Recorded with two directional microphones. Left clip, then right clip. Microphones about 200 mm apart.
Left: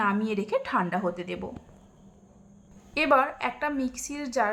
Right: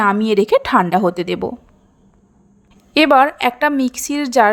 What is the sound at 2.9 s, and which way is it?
A woman's voice, 40° right (ahead or behind).